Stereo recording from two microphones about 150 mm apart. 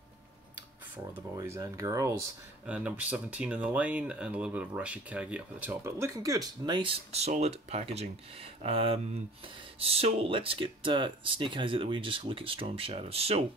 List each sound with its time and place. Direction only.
1.3 s speech: 20° right (ahead or behind)
2.6 s speech: 10° right (ahead or behind)
5.7 s speech: 20° right (ahead or behind); by 13.4 s 40° right (ahead or behind)